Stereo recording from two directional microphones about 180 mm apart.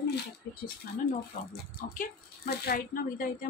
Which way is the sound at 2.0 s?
60° left (ahead or behind).